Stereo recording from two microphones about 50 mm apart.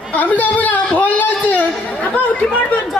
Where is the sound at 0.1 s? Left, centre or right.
Left.